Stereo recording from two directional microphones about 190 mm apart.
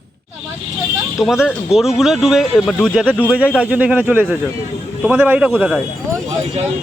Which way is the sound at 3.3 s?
5° right (ahead or behind).